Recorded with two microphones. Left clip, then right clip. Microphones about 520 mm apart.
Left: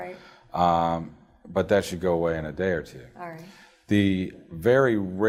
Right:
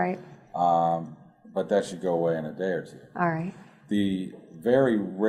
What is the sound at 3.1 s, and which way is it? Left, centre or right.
Speech, right.